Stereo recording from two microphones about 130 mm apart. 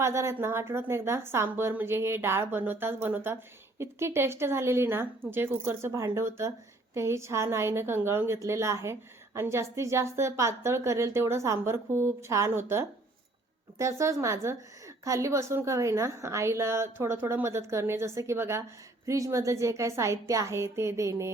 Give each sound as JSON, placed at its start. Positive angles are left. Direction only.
{"t": 0.0, "sound": "a woman's voice", "side_deg": -20}